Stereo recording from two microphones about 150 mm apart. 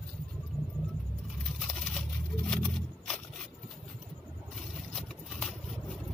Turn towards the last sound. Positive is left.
turn(degrees=0)  # may be behind; listen again after turning